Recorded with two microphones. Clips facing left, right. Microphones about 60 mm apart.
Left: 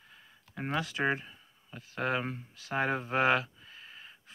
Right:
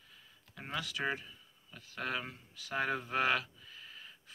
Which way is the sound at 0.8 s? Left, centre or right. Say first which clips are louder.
Left 5 dB; left.